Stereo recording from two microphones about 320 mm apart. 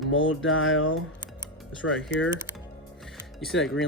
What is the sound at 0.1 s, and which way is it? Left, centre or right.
Speech, left.